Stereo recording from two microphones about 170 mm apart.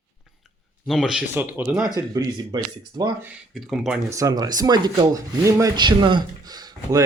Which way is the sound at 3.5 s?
Centre (ahead or behind).